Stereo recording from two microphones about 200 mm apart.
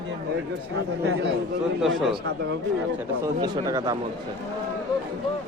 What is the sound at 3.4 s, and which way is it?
Speech, 20° right (ahead or behind).